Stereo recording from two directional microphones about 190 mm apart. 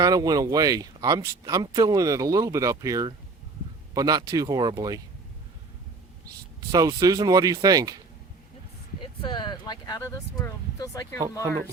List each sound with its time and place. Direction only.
0.0 s speech: 20° right (ahead or behind)
6.7 s speech: 20° right (ahead or behind)
9.2 s speech: 25° left (ahead or behind)